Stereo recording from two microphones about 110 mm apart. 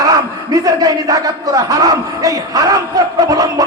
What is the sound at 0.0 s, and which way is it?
Speech, 35° right (ahead or behind).